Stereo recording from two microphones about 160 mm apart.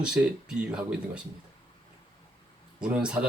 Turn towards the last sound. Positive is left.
turn(degrees=-5)  # may be behind; listen again after turning